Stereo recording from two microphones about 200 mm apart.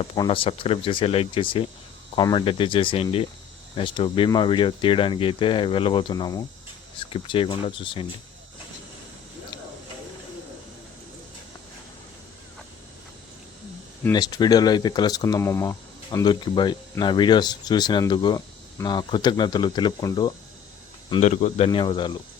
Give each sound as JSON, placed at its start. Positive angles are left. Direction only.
{"t": 0.0, "sound": "speech", "side_deg": 25}
{"t": 14.1, "sound": "speech", "side_deg": 20}
{"t": 21.2, "sound": "speech", "side_deg": 35}